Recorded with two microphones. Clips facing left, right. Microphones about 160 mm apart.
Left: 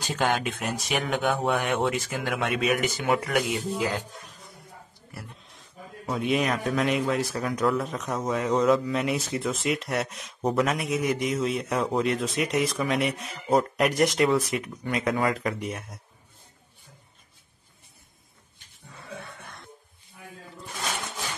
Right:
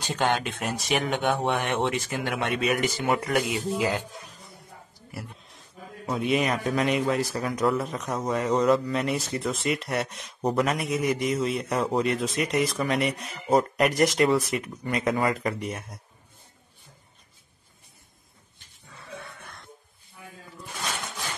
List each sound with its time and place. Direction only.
0.0 s a man's voice: centre (ahead or behind)